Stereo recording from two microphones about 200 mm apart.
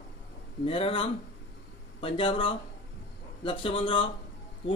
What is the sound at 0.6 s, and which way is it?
A man's voice, 25° left (ahead or behind).